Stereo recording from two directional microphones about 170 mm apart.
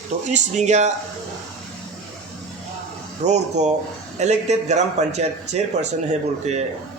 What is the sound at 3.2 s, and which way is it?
A man's voice, 45° right (ahead or behind).